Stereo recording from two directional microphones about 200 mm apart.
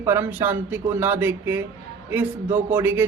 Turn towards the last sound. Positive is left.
turn(degrees=-10)  # may be behind; listen again after turning